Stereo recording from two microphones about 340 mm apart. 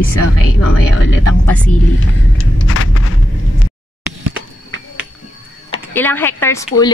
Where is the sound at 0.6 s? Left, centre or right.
Left.